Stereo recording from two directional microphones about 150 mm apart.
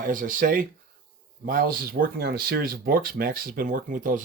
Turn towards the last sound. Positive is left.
turn(degrees=-65)  # may be behind; listen again after turning